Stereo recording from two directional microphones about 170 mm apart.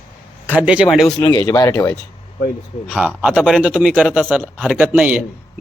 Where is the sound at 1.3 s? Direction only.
20° left (ahead or behind).